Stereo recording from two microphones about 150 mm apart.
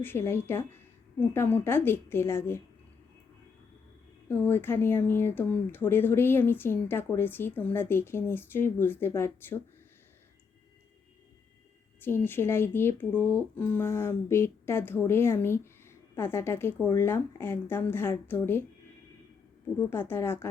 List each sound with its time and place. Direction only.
0.0 s speech: 15° left (ahead or behind)
4.3 s speech: 15° left (ahead or behind)
11.9 s speech: 15° left (ahead or behind)
19.9 s speech: 15° left (ahead or behind)